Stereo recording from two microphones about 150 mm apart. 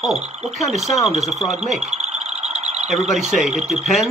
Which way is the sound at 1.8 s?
45° right (ahead or behind).